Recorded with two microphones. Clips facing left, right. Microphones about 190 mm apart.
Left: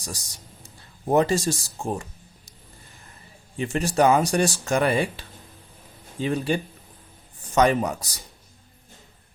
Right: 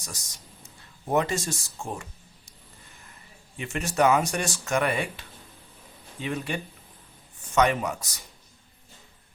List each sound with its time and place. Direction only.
1.0 s speech: 35° left (ahead or behind)
3.6 s speech: 35° left (ahead or behind)